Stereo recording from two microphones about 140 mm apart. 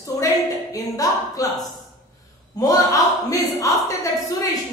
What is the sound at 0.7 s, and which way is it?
A woman's voice, 25° left (ahead or behind).